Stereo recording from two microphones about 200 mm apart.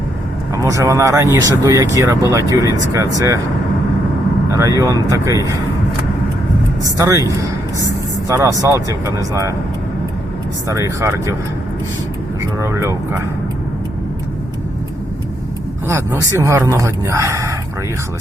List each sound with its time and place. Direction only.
0.5 s speech: 15° right (ahead or behind)
4.5 s speech: 15° right (ahead or behind)
6.8 s speech: 15° right (ahead or behind)
10.7 s speech: 15° right (ahead or behind)
12.4 s speech: 15° right (ahead or behind)
15.9 s speech: 15° right (ahead or behind)